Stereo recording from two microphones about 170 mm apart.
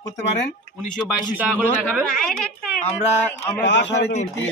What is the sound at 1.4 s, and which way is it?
Speech, 10° right (ahead or behind).